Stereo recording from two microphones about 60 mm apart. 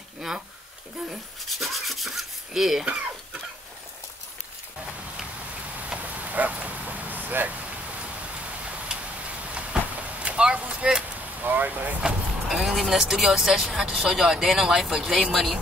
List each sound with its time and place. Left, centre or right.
1.6 s rub: centre
2.8 s chicken: centre
5.9 s vehicle: right
9.5 s a sound: right
11.4 s speech: right
12.0 s speech: centre